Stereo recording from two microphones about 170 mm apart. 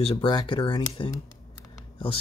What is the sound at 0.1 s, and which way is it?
Speech, 30° left (ahead or behind).